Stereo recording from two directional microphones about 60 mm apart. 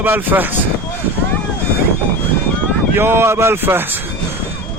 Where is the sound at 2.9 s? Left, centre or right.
Right.